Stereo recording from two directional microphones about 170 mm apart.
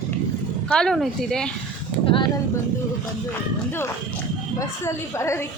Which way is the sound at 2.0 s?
30° left (ahead or behind).